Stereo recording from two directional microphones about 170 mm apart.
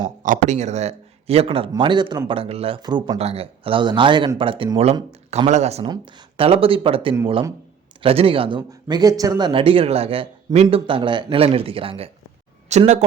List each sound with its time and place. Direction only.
0.2 s a man's voice: 45° right (ahead or behind); by 3.2 s 25° right (ahead or behind)
3.2 s speech: 35° right (ahead or behind)